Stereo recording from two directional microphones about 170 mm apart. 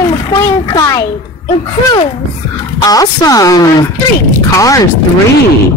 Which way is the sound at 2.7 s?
20° left (ahead or behind).